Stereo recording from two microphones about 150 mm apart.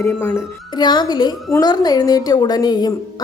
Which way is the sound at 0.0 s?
15° left (ahead or behind).